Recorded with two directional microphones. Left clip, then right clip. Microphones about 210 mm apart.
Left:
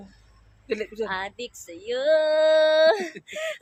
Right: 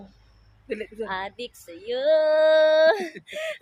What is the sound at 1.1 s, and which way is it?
Speech, 15° right (ahead or behind).